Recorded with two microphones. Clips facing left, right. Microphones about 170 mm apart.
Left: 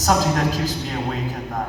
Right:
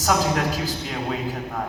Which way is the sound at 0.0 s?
40° left (ahead or behind).